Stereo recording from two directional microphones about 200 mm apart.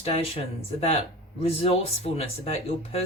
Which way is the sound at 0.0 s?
30° left (ahead or behind).